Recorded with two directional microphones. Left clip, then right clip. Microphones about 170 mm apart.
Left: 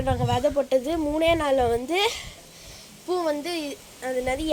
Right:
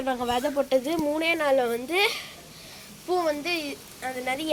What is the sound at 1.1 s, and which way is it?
Speech, 30° left (ahead or behind).